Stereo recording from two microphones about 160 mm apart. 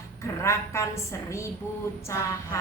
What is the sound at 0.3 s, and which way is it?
A woman's voice, 20° left (ahead or behind).